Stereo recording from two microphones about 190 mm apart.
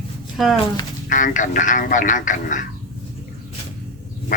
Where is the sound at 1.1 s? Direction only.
45° left (ahead or behind).